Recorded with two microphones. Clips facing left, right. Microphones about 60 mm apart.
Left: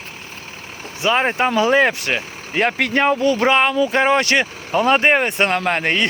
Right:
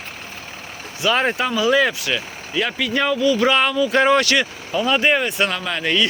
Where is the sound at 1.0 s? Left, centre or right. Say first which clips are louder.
Left 1 dB; left.